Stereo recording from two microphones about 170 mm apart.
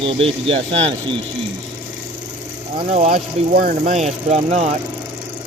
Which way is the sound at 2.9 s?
45° right (ahead or behind).